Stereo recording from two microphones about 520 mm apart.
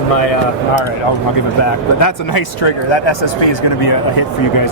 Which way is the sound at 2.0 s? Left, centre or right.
Left.